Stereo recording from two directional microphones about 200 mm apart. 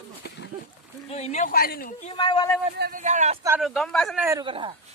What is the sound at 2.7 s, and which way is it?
Speech, 55° right (ahead or behind).